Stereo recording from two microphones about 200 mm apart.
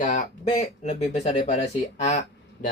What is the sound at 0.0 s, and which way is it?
Speech, 35° left (ahead or behind).